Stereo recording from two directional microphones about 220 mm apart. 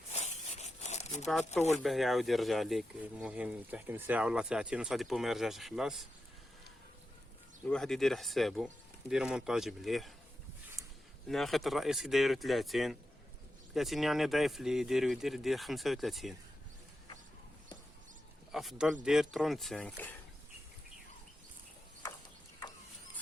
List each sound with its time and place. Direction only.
0.1 s a sound: 30° left (ahead or behind)
1.7 s speech: centre (ahead or behind)
7.7 s speech: centre (ahead or behind)
10.8 s a sound: centre (ahead or behind)
11.3 s speech: centre (ahead or behind)
18.5 s speech: centre (ahead or behind)